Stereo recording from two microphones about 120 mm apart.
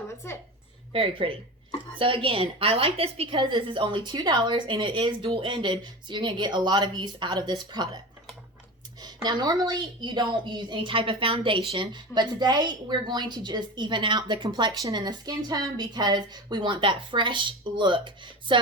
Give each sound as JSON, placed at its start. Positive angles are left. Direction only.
{"t": 0.2, "sound": "a woman's voice", "side_deg": 20}
{"t": 0.9, "sound": "a woman's voice", "side_deg": -50}
{"t": 9.0, "sound": "speech", "side_deg": -35}